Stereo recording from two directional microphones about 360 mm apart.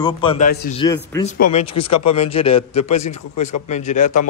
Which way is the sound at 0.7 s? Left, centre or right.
Centre.